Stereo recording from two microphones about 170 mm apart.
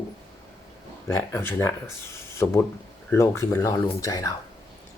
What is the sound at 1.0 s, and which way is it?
Speech, 15° left (ahead or behind).